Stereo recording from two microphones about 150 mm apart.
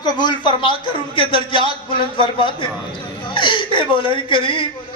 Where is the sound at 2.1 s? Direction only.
35° left (ahead or behind).